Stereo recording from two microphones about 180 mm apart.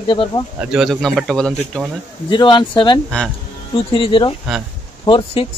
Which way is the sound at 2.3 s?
25° left (ahead or behind).